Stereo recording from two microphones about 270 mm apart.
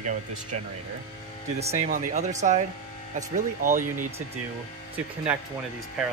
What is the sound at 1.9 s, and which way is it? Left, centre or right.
Speech, right.